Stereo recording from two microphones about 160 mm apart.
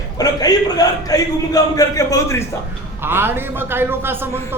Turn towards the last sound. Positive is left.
turn(degrees=-15)  # may be behind; listen again after turning